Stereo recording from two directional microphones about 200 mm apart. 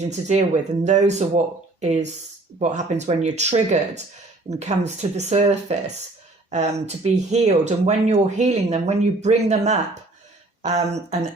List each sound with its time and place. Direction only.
0.0 s speech: 35° right (ahead or behind)